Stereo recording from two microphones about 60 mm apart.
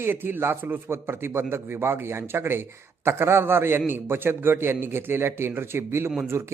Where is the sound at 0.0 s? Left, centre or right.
Right.